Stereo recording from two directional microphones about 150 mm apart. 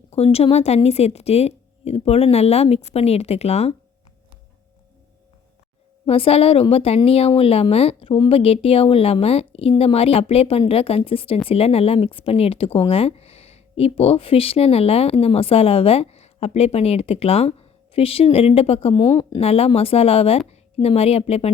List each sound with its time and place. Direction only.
0.1 s speech: 45° left (ahead or behind)
6.1 s speech: 40° left (ahead or behind)
19.0 s a woman's voice: 30° left (ahead or behind)